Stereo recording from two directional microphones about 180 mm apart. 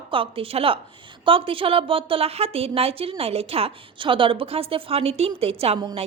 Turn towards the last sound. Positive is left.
turn(degrees=-30)  # may be behind; listen again after turning